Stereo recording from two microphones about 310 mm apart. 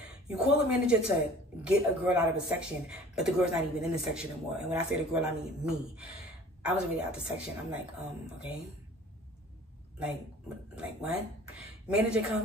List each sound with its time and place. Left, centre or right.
0.7 s speech: centre
10.7 s speech: centre